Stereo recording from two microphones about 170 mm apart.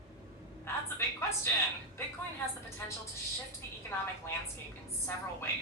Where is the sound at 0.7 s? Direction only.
15° left (ahead or behind).